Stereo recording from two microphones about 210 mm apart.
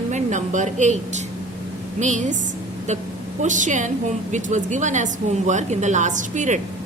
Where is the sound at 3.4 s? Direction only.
35° right (ahead or behind).